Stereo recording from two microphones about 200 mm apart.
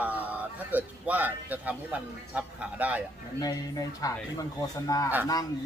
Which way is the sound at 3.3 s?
20° left (ahead or behind).